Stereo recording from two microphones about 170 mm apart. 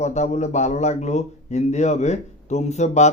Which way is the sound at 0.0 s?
40° left (ahead or behind).